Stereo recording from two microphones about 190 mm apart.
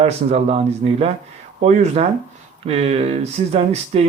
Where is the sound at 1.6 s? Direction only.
35° right (ahead or behind).